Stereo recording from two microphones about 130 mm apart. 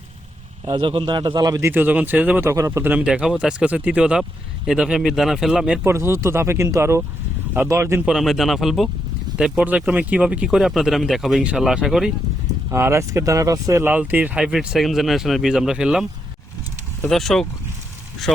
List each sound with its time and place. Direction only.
0.6 s a man's voice: 40° right (ahead or behind); by 5.8 s centre (ahead or behind)
5.8 s speech: 20° right (ahead or behind)
8.0 s speech: centre (ahead or behind)
12.7 s a man's voice: 20° right (ahead or behind); by 16.0 s 5° right (ahead or behind)
17.1 s speech: centre (ahead or behind)